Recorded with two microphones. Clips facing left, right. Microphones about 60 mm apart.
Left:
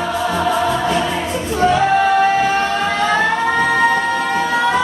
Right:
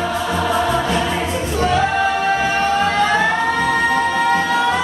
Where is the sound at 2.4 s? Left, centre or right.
Centre.